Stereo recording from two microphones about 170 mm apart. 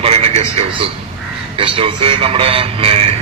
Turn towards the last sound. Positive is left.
turn(degrees=-35)  # may be behind; listen again after turning